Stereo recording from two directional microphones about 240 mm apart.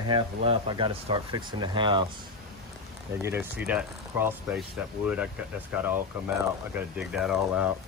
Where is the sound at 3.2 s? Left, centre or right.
Centre.